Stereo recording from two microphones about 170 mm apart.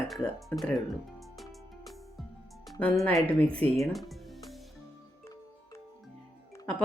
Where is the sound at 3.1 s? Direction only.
20° left (ahead or behind).